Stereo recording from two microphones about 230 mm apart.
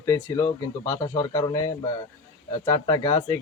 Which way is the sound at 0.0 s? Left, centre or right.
Centre.